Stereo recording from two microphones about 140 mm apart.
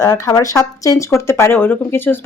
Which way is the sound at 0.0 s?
25° left (ahead or behind).